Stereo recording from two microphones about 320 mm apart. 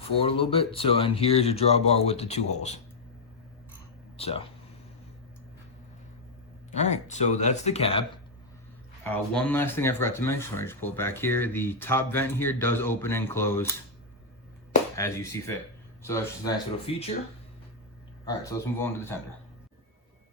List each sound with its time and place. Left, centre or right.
0.3 s speech: centre
4.2 s speech: centre
6.7 s speech: left
9.0 s speech: centre
14.9 s speech: centre
18.3 s speech: centre